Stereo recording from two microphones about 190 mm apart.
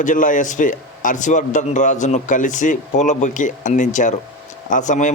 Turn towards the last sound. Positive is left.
turn(degrees=40)  # may be behind; listen again after turning